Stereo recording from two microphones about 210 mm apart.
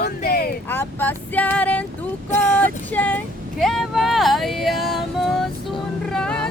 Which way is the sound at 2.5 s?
5° left (ahead or behind).